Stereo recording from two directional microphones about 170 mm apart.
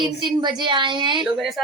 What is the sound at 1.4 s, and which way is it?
Speech, centre (ahead or behind).